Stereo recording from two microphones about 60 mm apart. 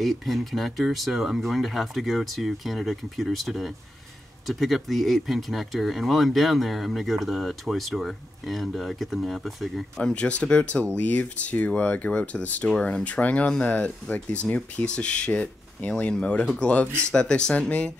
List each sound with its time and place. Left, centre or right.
0.0 s speech: centre
9.9 s speech: centre